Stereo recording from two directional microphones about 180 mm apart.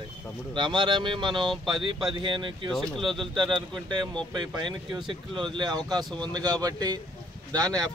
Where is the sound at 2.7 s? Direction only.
Centre (ahead or behind).